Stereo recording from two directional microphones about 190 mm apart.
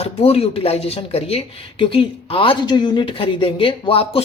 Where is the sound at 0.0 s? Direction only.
30° left (ahead or behind).